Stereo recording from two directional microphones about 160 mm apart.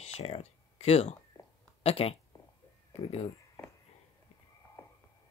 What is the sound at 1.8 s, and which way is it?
Speech, 40° left (ahead or behind).